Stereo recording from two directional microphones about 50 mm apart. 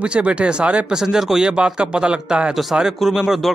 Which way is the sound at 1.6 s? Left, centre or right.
Right.